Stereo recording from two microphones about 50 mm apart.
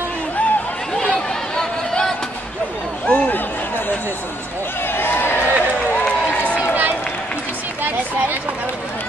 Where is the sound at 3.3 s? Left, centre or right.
Left.